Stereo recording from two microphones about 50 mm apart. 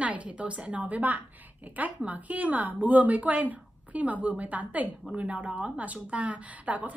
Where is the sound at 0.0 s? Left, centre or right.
Right.